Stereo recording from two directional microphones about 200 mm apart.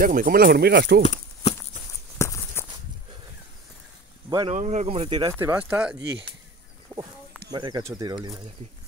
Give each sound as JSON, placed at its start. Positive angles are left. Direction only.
{"t": 0.0, "sound": "speech", "side_deg": -45}
{"t": 1.0, "sound": "a sound", "side_deg": 35}
{"t": 2.1, "sound": "a sound", "side_deg": 15}
{"t": 4.3, "sound": "speech", "side_deg": -20}
{"t": 4.6, "sound": "speech", "side_deg": -35}
{"t": 5.4, "sound": "speech", "side_deg": -10}
{"t": 7.5, "sound": "speech", "side_deg": -20}